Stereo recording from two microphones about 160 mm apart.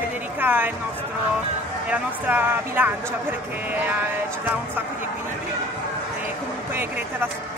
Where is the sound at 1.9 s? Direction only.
10° right (ahead or behind).